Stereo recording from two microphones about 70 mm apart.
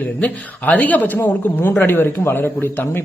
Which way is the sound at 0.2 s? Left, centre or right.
Left.